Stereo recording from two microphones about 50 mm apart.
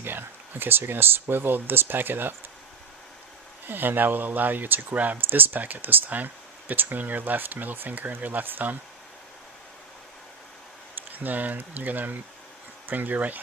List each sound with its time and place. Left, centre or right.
0.0 s speech: right
3.7 s speech: right
11.1 s speech: right